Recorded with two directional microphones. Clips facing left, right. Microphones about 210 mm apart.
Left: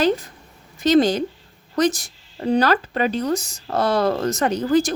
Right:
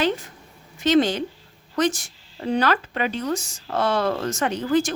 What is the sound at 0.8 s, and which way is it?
Speech, 40° left (ahead or behind).